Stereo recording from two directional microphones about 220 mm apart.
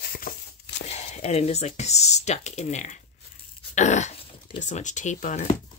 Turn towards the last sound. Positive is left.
turn(degrees=35)  # may be behind; listen again after turning